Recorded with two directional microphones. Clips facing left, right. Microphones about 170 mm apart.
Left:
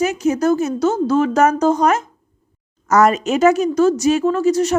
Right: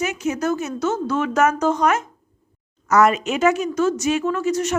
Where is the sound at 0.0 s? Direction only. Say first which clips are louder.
Left 6 dB; 35° left (ahead or behind).